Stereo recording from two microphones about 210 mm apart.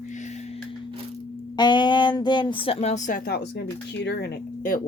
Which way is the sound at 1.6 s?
20° left (ahead or behind).